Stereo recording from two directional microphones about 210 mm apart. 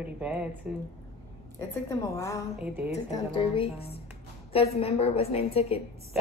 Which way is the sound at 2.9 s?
30° left (ahead or behind).